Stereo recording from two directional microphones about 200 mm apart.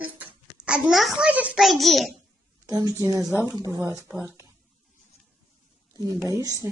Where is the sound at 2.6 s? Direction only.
15° right (ahead or behind).